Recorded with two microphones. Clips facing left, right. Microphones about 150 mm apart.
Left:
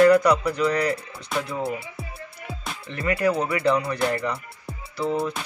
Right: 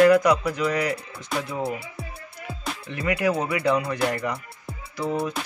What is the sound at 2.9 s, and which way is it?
Speech, 15° right (ahead or behind).